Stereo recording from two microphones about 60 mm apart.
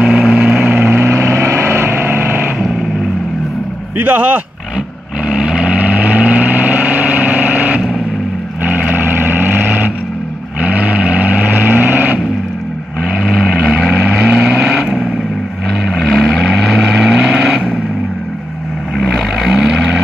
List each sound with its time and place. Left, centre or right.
0.0 s vehicle: centre
0.7 s vehicle: right
4.0 s speech: right
5.3 s vehicle: centre
5.8 s vehicle: right
13.2 s vehicle: centre
13.7 s vehicle: centre
18.9 s vehicle: centre